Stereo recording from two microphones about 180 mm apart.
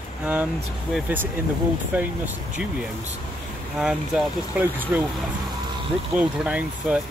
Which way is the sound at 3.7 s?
Centre (ahead or behind).